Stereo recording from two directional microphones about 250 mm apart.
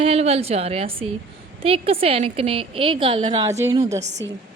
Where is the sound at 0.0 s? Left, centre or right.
Right.